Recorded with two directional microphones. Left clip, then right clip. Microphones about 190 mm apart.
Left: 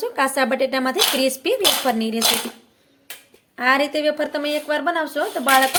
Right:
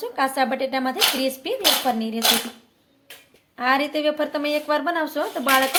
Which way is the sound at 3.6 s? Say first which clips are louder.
Left 3 dB; 15° left (ahead or behind).